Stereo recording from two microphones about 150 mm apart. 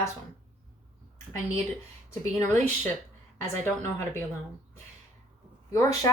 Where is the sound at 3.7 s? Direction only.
15° left (ahead or behind).